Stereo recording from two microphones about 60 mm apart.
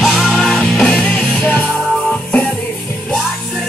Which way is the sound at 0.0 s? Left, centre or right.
Centre.